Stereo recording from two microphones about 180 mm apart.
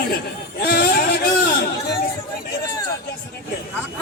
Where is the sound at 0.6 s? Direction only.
60° left (ahead or behind).